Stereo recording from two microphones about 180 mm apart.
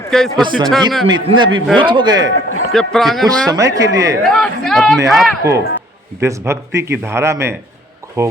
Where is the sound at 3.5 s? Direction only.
20° right (ahead or behind).